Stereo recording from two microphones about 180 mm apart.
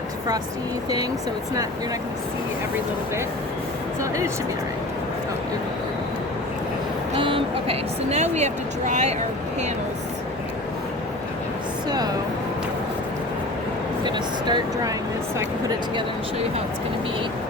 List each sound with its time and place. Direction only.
7.2 s speech: 30° right (ahead or behind)
11.9 s speech: 20° right (ahead or behind)
14.0 s speech: 25° right (ahead or behind)